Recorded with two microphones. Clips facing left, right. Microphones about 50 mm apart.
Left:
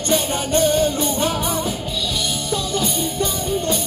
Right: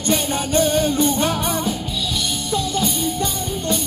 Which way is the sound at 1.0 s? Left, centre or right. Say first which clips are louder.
Right 2 dB; right.